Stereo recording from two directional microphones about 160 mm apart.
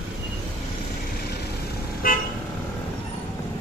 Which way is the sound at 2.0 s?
60° left (ahead or behind).